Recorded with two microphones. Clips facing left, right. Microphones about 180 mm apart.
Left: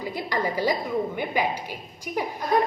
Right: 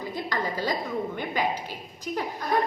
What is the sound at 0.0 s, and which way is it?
A woman's voice, 10° left (ahead or behind).